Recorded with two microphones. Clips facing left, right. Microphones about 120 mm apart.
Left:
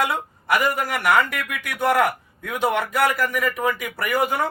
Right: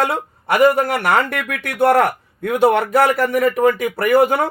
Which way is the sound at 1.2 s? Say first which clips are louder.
Right 3 dB; 55° right (ahead or behind).